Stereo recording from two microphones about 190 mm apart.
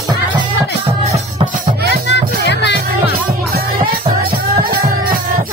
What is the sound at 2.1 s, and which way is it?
Music, 65° left (ahead or behind).